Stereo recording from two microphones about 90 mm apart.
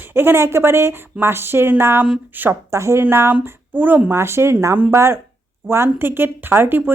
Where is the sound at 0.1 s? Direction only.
25° right (ahead or behind).